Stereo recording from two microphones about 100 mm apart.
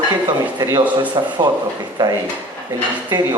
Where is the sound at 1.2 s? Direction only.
45° right (ahead or behind).